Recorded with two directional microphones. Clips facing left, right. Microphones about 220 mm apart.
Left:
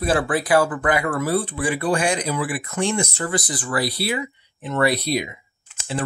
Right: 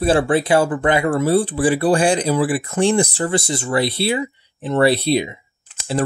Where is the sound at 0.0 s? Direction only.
30° right (ahead or behind).